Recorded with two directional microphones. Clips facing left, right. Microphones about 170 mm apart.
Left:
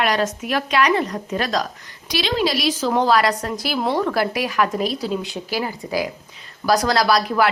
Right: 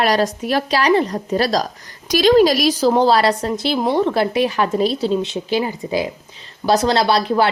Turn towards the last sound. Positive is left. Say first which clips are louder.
# right 2 dB
turn(degrees=-30)  # may be behind; listen again after turning